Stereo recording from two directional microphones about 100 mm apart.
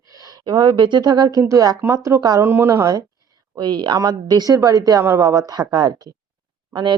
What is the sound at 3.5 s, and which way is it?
Speech, 50° right (ahead or behind).